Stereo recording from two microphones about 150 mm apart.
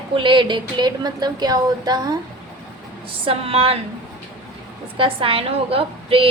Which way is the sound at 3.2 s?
40° right (ahead or behind).